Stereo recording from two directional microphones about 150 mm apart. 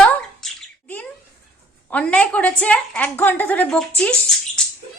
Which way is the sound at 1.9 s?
10° left (ahead or behind).